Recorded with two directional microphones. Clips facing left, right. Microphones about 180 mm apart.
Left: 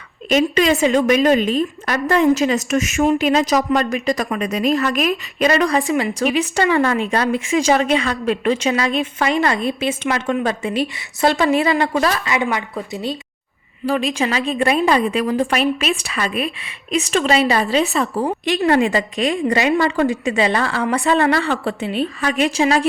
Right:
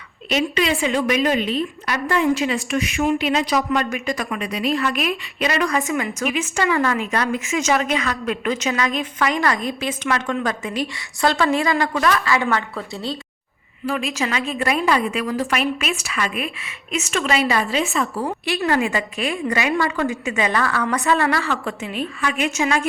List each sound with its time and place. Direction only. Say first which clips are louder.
0.3 s a woman's voice: left 5 dB; 45° left (ahead or behind); by 13.1 s 20° left (ahead or behind)
13.8 s a woman's voice: left 4 dB; 30° left (ahead or behind)